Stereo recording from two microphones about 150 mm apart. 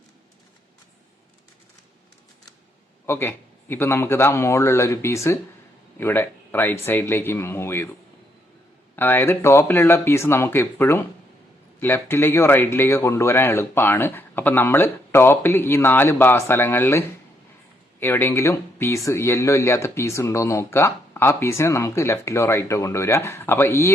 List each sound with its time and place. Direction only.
3.1 s speech: 15° left (ahead or behind)
9.0 s speech: 15° left (ahead or behind)
18.0 s speech: 15° left (ahead or behind)